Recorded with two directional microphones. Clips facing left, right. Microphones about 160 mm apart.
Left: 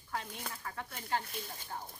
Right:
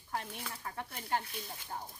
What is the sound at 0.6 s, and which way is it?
Speech, 25° right (ahead or behind).